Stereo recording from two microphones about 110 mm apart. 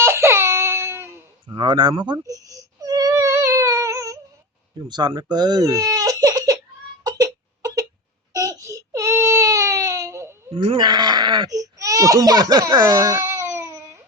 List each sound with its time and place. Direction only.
0.0 s baby cry: 25° right (ahead or behind)
1.5 s baby cry: 45° right (ahead or behind); by 4.2 s 30° right (ahead or behind)
4.9 s speech: 40° right (ahead or behind)
7.0 s cough: 35° right (ahead or behind)
8.3 s baby cry: 30° right (ahead or behind)
10.5 s speech: 60° right (ahead or behind); by 12.8 s 40° right (ahead or behind)
12.9 s a sound: 35° right (ahead or behind)